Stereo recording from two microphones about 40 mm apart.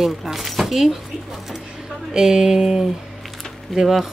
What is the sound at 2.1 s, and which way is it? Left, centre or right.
Speech, centre.